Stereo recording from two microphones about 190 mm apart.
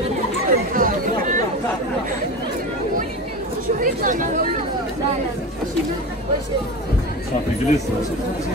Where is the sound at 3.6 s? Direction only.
45° right (ahead or behind).